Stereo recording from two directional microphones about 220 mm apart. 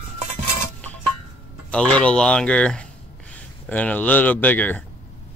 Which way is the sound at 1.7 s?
5° left (ahead or behind).